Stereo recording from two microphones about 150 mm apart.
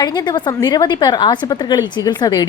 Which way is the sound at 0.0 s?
30° left (ahead or behind).